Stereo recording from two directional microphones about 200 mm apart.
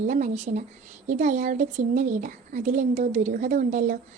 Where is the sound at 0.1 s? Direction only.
35° right (ahead or behind).